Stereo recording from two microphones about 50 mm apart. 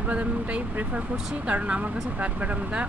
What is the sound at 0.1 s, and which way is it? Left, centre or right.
Speech, right.